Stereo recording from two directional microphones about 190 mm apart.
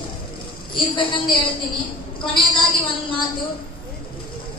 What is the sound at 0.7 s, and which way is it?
A woman's voice, 25° left (ahead or behind).